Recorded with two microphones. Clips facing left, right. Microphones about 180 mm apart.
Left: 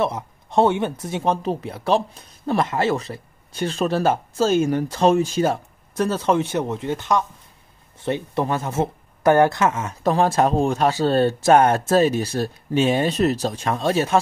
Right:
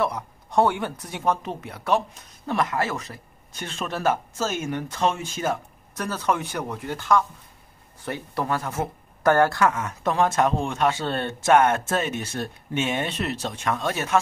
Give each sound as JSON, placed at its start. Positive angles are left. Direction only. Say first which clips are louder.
{"t": 0.0, "sound": "speech", "louder": "left 3 dB", "side_deg": 25}